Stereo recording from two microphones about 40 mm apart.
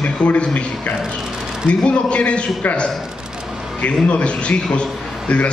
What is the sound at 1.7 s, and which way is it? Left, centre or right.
Speech, left.